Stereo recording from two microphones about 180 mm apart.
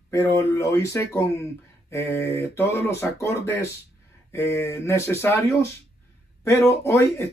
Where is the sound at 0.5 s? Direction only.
15° left (ahead or behind).